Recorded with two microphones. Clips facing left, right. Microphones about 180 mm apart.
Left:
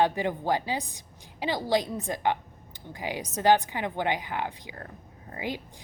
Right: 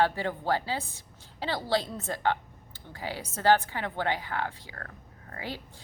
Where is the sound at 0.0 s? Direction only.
15° left (ahead or behind).